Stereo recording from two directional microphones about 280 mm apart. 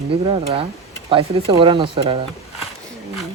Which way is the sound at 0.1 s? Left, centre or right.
Centre.